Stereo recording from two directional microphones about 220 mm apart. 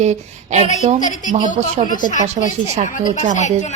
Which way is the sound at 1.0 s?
35° left (ahead or behind).